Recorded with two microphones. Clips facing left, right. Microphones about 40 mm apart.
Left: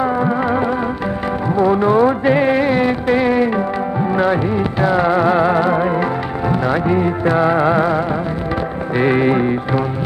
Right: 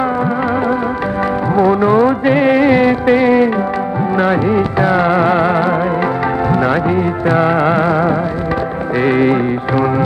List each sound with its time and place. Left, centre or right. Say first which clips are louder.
1.5 s music: right 2 dB; centre
2.6 s music of bollywood: right 5 dB; right
3.2 s music: right 4 dB; centre
4.2 s music: right 4 dB; right
6.9 s music: right 1 dB; centre
7.3 s music: right 2 dB; centre
9.0 s music: right 2 dB; centre